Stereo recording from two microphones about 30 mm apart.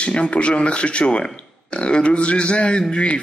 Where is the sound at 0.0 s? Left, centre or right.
Left.